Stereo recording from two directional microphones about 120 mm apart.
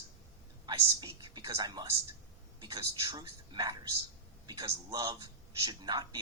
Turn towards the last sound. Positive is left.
turn(degrees=-35)  # may be behind; listen again after turning